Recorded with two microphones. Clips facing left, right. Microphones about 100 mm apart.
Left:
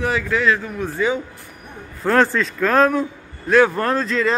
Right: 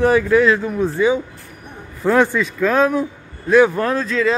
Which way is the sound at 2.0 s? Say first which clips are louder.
Right 1 dB; 10° right (ahead or behind).